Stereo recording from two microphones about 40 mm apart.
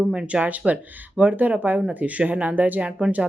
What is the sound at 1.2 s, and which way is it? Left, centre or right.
Speech, right.